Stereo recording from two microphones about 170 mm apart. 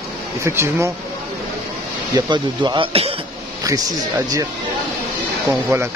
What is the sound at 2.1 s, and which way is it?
Speech, 25° right (ahead or behind).